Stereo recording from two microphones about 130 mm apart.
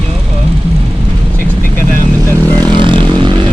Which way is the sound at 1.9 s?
15° left (ahead or behind).